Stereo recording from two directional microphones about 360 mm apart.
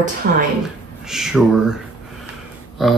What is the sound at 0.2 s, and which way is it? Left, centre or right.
Speech, right.